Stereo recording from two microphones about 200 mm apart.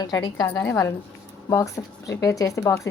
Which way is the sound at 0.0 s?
20° left (ahead or behind).